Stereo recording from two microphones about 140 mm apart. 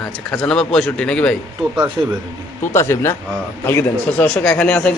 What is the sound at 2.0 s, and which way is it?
Speech, 25° right (ahead or behind).